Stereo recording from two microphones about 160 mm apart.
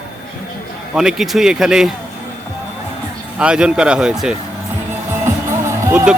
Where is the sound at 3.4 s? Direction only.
5° right (ahead or behind).